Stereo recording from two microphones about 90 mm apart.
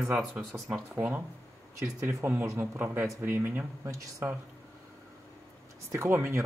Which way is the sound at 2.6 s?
25° right (ahead or behind).